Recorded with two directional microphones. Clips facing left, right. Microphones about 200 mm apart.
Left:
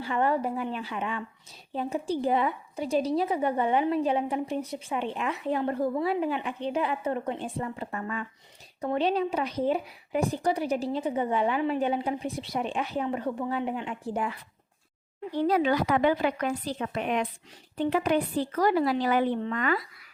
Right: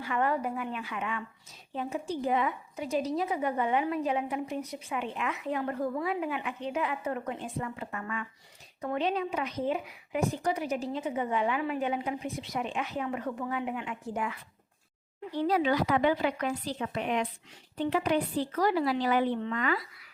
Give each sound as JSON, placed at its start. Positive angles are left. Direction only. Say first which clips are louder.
{"t": 0.0, "sound": "a woman's voice", "louder": "left 3 dB", "side_deg": 30}
{"t": 15.4, "sound": "a woman's voice", "louder": "left 2 dB", "side_deg": 50}